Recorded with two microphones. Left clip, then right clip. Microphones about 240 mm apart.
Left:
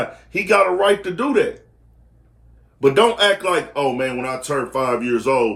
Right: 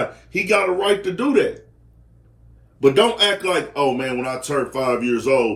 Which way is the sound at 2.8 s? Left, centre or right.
Centre.